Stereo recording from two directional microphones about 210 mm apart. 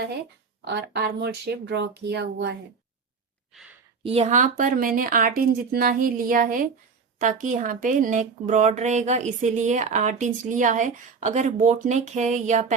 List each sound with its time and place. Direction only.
0.7 s speech: 55° right (ahead or behind)
4.0 s speech: 30° right (ahead or behind)